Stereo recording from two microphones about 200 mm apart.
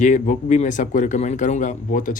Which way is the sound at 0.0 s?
40° left (ahead or behind).